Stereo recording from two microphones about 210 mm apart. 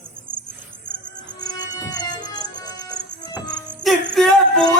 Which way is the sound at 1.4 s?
20° left (ahead or behind).